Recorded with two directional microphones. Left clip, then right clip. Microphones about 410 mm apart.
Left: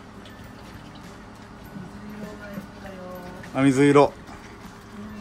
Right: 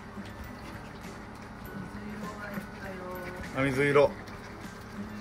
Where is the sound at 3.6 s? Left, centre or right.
Centre.